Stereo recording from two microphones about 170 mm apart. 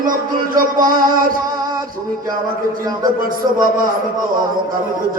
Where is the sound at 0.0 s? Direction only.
55° right (ahead or behind).